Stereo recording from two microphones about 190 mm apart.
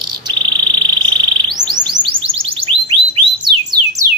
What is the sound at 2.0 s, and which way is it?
Music, 30° right (ahead or behind).